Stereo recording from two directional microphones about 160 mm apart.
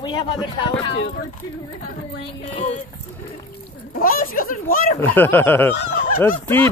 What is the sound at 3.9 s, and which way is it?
Speech, 65° left (ahead or behind).